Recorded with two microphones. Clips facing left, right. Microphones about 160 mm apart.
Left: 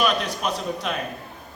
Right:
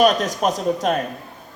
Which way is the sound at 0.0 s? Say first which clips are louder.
Right 6 dB; 45° right (ahead or behind).